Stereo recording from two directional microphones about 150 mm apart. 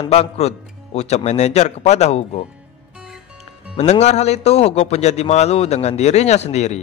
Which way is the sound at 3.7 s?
50° left (ahead or behind).